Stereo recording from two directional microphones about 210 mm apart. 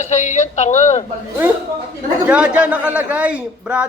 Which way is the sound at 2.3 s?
5° right (ahead or behind).